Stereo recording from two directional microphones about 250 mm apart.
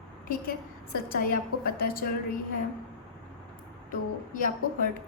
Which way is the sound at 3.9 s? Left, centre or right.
Left.